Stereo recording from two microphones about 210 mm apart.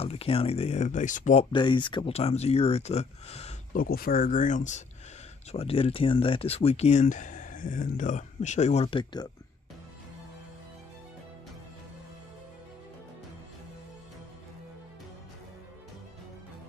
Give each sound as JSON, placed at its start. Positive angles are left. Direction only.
{"t": 0.0, "sound": "speech", "side_deg": 30}
{"t": 3.7, "sound": "speech", "side_deg": 45}